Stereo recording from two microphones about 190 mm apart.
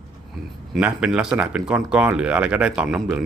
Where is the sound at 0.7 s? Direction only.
5° right (ahead or behind).